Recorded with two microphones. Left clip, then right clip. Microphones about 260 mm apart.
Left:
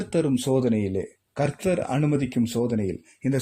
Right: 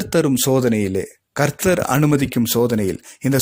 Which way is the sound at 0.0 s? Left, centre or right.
Right.